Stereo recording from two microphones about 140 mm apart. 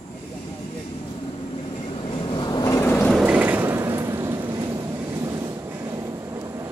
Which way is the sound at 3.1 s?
10° right (ahead or behind).